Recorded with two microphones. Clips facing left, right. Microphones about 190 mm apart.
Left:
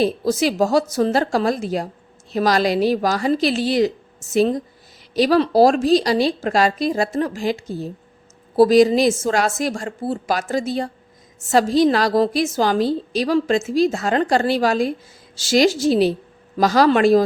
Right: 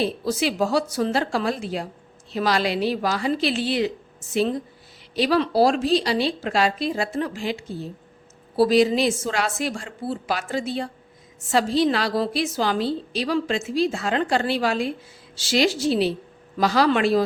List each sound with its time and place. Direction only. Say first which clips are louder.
0.0 s a woman's voice: left 5 dB; 40° left (ahead or behind)